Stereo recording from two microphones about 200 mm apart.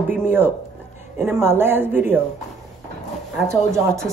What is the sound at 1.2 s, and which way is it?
Speech, 10° right (ahead or behind).